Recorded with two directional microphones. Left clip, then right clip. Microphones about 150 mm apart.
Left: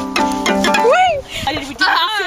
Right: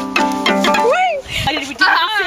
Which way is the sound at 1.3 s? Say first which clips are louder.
Right 2 dB; centre (ahead or behind).